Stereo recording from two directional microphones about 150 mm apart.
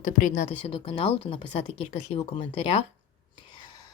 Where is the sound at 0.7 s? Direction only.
40° left (ahead or behind).